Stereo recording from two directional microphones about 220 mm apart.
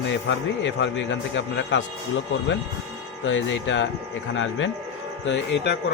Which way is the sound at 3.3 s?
60° left (ahead or behind).